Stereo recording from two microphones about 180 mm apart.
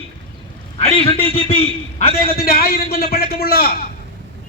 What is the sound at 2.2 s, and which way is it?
A man's voice, 55° left (ahead or behind).